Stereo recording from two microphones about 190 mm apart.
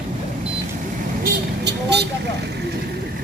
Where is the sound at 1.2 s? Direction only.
60° right (ahead or behind).